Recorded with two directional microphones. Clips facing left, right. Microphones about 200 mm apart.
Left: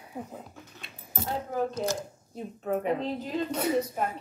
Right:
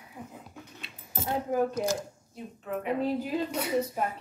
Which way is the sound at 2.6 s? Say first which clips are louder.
Left 5 dB; 40° left (ahead or behind).